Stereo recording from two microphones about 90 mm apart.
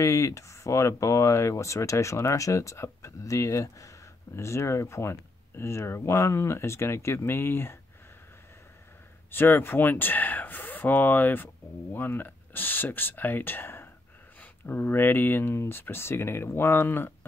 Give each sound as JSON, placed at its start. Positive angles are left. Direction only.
{"t": 0.0, "sound": "speech", "side_deg": 35}
{"t": 9.3, "sound": "speech", "side_deg": 25}